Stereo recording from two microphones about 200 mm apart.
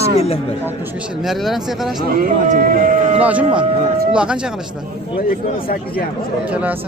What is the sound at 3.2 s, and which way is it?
Speech, 5° right (ahead or behind).